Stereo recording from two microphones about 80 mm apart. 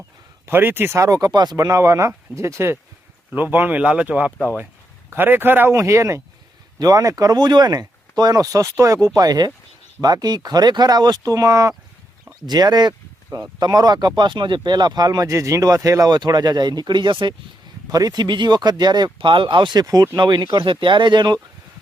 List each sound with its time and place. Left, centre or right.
0.4 s a man's voice: right
0.9 s speech: right
1.5 s speech: right
3.3 s a man's voice: right
5.7 s speech: right
6.7 s speech: right
12.5 s speech: right
17.9 s speech: right
19.8 s speech: right
20.1 s speech: right